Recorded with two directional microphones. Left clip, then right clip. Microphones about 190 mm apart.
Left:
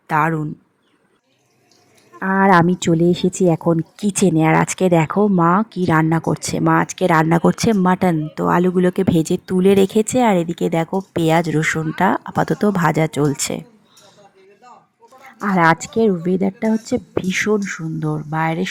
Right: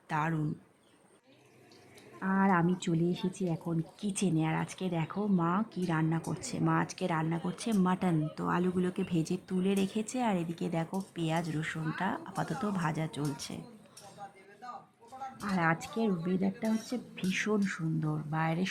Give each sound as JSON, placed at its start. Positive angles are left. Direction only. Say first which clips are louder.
{"t": 0.1, "sound": "speech", "louder": "left 16 dB", "side_deg": 30}
{"t": 2.1, "sound": "speech", "louder": "left 16 dB", "side_deg": 35}
{"t": 15.4, "sound": "speech", "louder": "left 17 dB", "side_deg": 35}